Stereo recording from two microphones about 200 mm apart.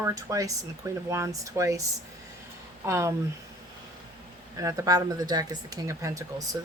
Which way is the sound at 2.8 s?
15° right (ahead or behind).